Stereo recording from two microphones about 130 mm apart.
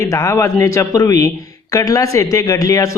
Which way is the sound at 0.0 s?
25° left (ahead or behind).